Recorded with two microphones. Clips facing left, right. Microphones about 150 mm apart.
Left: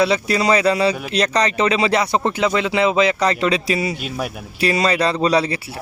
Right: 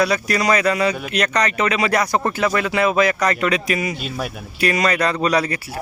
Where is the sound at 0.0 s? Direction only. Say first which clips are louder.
Left 2 dB; 25° left (ahead or behind).